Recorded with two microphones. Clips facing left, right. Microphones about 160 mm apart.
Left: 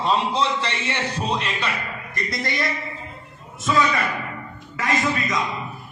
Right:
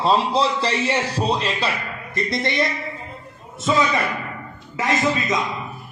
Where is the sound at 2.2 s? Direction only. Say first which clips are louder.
Right 5 dB; centre (ahead or behind).